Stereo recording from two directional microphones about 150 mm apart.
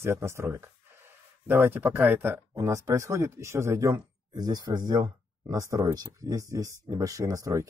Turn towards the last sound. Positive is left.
turn(degrees=-25)  # may be behind; listen again after turning